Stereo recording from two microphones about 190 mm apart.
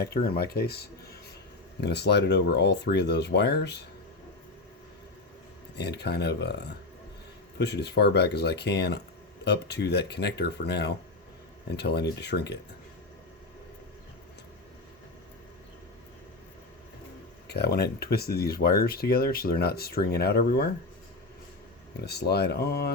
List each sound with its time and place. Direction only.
0.0 s speech: 55° left (ahead or behind)
5.7 s speech: 60° left (ahead or behind)
17.5 s speech: 60° left (ahead or behind)
22.0 s speech: 60° left (ahead or behind)